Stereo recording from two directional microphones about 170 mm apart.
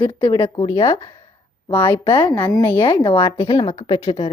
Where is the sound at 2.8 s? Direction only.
30° left (ahead or behind).